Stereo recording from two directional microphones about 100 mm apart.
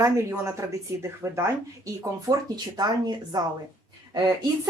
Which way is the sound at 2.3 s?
45° right (ahead or behind).